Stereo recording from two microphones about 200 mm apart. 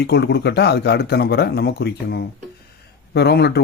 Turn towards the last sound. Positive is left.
turn(degrees=55)  # may be behind; listen again after turning